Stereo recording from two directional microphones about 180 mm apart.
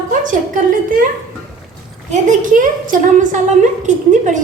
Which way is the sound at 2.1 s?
45° right (ahead or behind).